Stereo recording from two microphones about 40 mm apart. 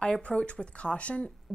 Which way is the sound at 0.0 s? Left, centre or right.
Left.